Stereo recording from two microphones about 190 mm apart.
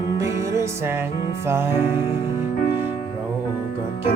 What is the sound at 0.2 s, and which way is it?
Music, 15° right (ahead or behind).